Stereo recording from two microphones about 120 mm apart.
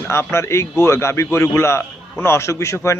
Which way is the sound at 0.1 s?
20° left (ahead or behind).